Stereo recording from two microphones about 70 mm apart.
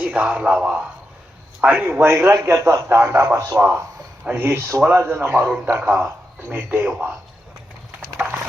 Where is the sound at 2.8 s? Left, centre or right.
Right.